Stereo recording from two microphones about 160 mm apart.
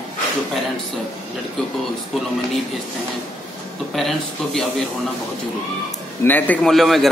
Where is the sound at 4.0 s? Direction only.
Centre (ahead or behind).